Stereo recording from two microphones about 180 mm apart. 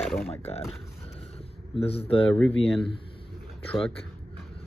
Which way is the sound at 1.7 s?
30° left (ahead or behind).